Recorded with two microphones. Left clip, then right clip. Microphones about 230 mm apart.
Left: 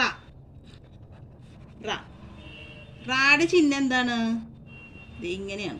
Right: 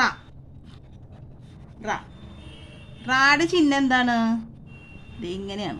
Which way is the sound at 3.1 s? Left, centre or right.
Right.